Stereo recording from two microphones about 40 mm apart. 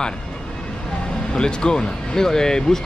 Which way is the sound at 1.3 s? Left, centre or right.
Left.